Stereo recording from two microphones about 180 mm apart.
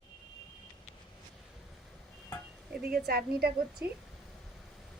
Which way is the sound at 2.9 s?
55° right (ahead or behind).